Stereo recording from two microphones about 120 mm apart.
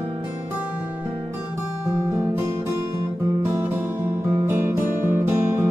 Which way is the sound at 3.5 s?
20° right (ahead or behind).